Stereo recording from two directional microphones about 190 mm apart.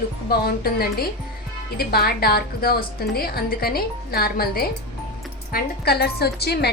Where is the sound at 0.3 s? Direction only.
55° left (ahead or behind).